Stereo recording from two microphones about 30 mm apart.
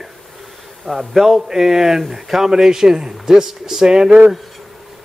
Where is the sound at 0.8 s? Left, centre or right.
Centre.